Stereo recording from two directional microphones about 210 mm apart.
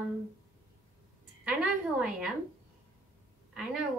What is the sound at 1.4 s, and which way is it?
Speech, 5° right (ahead or behind).